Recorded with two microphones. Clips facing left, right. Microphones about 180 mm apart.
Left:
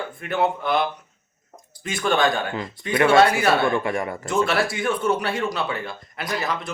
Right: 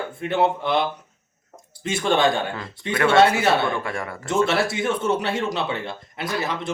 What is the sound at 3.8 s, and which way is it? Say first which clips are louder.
Speech: left 4 dB; 20° left (ahead or behind).